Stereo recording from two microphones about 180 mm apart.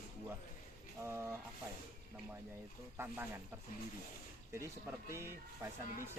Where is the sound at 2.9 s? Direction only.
10° right (ahead or behind).